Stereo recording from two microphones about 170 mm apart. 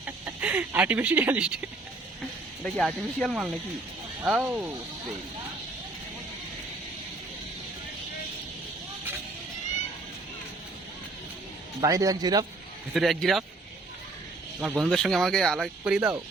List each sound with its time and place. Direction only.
0.0 s speech: 10° right (ahead or behind)
2.6 s speech: 5° left (ahead or behind)
11.8 s speech: 20° right (ahead or behind)
12.9 s speech: centre (ahead or behind)
14.6 s speech: centre (ahead or behind)